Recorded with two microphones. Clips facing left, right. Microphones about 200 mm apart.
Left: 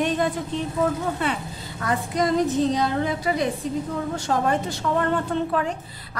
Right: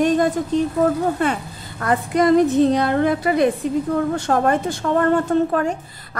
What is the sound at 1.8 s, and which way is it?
A woman's voice, 60° right (ahead or behind).